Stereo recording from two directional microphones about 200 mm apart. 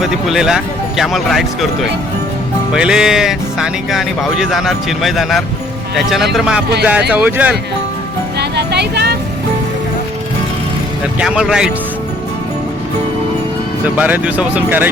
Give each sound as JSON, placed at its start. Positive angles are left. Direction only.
{"t": 0.0, "sound": "speech", "side_deg": 0}
{"t": 2.7, "sound": "speech", "side_deg": -5}
{"t": 8.4, "sound": "vehicle", "side_deg": -55}
{"t": 11.2, "sound": "speech", "side_deg": -5}
{"t": 13.8, "sound": "speech", "side_deg": -5}